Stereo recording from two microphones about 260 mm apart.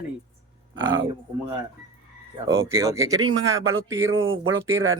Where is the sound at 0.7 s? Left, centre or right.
Right.